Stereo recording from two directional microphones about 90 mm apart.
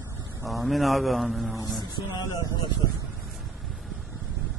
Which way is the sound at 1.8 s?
55° left (ahead or behind).